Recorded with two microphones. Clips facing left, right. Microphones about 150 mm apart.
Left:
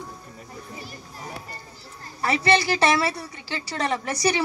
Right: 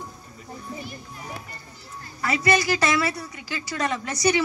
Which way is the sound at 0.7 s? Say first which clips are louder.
Right 2 dB; 35° left (ahead or behind).